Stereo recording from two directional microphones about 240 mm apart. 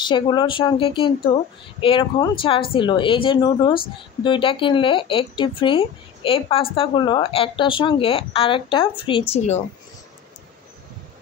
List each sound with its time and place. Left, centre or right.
0.0 s speech: centre